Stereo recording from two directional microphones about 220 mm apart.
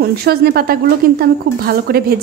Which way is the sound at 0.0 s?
45° right (ahead or behind).